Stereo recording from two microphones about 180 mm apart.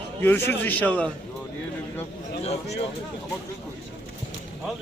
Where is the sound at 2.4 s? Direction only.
35° left (ahead or behind).